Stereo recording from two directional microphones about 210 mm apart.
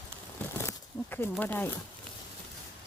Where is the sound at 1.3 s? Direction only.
10° left (ahead or behind).